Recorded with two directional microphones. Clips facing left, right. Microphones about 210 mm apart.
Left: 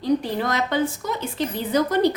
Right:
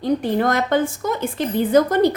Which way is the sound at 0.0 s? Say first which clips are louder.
Right 3 dB; 55° right (ahead or behind).